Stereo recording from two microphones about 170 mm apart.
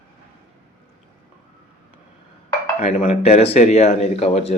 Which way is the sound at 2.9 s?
45° left (ahead or behind).